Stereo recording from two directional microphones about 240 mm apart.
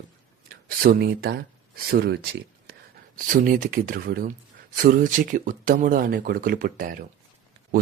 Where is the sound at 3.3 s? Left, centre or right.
Right.